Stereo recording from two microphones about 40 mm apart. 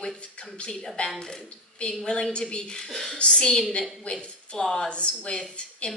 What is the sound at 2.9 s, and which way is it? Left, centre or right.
Speech, centre.